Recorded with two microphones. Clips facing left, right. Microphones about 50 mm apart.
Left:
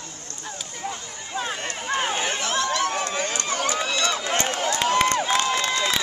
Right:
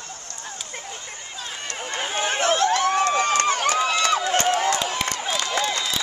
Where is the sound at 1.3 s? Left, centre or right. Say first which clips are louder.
Left 7 dB; left.